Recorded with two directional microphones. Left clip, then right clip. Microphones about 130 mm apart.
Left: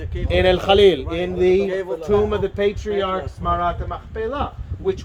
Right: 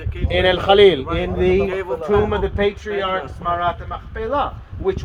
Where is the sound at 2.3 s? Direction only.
35° left (ahead or behind).